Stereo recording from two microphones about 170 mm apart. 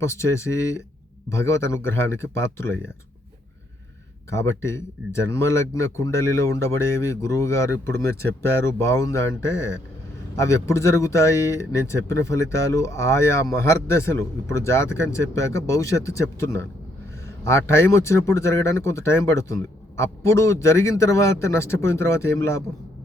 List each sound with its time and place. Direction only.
0.0 s speech: 15° left (ahead or behind)
4.3 s speech: 15° left (ahead or behind)